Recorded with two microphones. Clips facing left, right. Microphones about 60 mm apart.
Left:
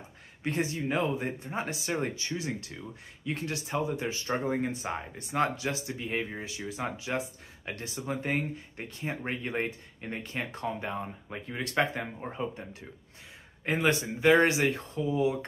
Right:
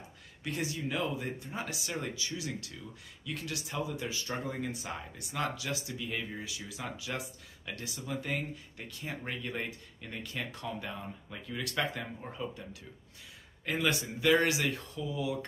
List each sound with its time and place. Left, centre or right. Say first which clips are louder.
0.4 s speech: left 5 dB; left
13.7 s speech: left 4 dB; left